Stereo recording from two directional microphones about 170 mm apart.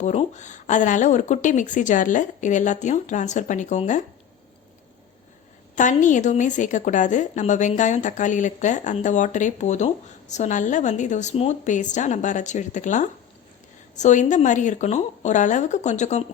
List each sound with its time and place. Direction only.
0.0 s a woman's voice: 40° left (ahead or behind)
5.7 s a woman's voice: 45° left (ahead or behind)